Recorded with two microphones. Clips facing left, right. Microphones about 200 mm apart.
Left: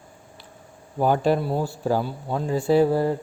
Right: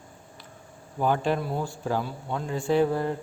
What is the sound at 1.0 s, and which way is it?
Speech, 40° left (ahead or behind).